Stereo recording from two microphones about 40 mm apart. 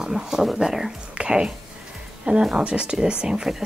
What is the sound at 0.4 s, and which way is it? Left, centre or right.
Speech, centre.